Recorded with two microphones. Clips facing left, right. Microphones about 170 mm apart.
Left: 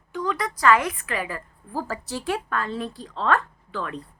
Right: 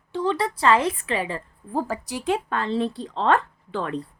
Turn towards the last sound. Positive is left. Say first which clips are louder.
# right 4 dB
turn(degrees=-30)  # may be behind; listen again after turning